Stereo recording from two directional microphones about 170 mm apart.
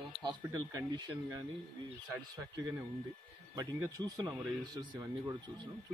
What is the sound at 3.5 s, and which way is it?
Speech, 20° right (ahead or behind).